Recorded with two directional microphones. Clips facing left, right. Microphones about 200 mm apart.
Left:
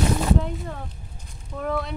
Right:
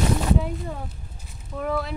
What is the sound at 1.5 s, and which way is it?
Speech, centre (ahead or behind).